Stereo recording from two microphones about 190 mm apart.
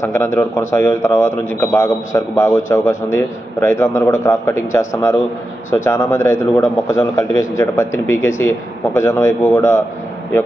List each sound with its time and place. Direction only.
0.0 s a man's voice: 15° left (ahead or behind)